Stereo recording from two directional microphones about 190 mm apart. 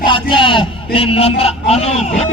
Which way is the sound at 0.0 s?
25° left (ahead or behind).